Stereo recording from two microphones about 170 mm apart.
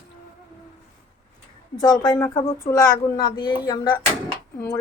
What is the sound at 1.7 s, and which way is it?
A woman's voice, 25° left (ahead or behind).